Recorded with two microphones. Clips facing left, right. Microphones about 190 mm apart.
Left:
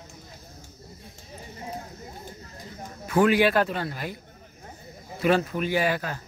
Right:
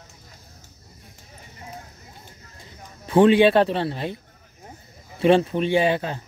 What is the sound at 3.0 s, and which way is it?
A man's voice, 30° right (ahead or behind).